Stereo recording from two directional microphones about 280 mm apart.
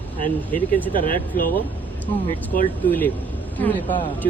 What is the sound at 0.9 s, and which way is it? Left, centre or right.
Speech, left.